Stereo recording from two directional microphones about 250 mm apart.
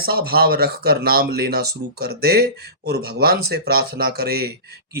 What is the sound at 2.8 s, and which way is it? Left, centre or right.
A man's voice, right.